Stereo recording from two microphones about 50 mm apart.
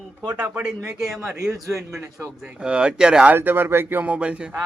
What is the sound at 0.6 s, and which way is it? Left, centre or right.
Speech, centre.